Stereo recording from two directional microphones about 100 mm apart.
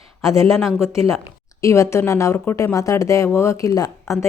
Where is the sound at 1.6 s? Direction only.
30° left (ahead or behind).